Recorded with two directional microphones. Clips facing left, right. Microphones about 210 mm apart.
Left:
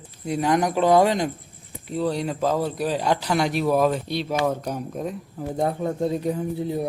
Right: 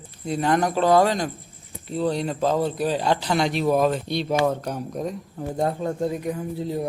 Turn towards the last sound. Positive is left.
turn(degrees=15)  # may be behind; listen again after turning